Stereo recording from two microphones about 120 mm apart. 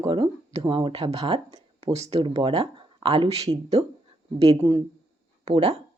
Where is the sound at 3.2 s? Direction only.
60° right (ahead or behind).